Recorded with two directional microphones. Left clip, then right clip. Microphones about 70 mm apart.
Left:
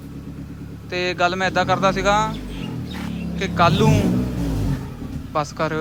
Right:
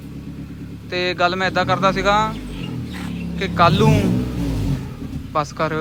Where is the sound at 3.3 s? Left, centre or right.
Left.